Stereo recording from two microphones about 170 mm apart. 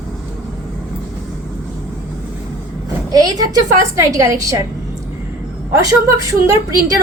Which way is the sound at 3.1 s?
20° right (ahead or behind).